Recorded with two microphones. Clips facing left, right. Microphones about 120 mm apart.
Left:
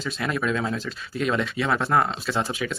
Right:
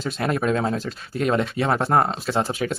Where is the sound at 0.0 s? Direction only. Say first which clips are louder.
Right 3 dB; 45° right (ahead or behind).